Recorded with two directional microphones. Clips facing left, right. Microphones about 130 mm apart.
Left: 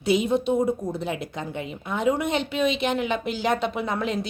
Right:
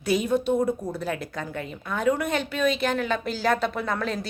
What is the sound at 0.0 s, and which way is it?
A woman's voice, 25° left (ahead or behind).